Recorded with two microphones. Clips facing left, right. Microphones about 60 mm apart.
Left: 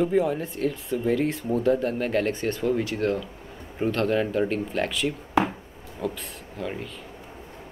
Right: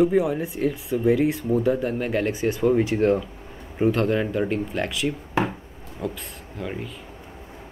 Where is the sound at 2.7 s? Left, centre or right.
Right.